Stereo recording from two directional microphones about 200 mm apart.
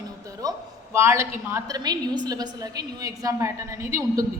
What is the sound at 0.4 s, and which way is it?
A woman's voice, 20° right (ahead or behind).